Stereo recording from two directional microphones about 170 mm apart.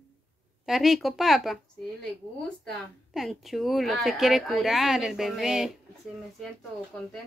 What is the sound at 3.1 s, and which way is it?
Speech, centre (ahead or behind).